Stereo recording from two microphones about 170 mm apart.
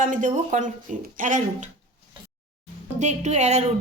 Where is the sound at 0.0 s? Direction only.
50° right (ahead or behind).